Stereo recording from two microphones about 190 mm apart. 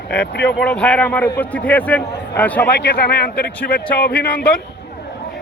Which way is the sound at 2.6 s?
60° left (ahead or behind).